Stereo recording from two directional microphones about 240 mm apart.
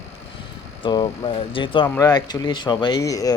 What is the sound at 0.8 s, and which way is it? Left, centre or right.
Speech, centre.